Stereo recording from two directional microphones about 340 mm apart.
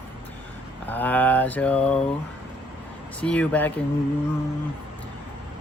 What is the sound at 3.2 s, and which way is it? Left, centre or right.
Mantra, centre.